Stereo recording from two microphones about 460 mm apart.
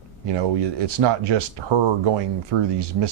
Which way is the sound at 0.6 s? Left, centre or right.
Right.